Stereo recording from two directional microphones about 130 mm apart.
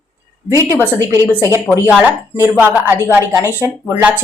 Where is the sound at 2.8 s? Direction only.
15° right (ahead or behind).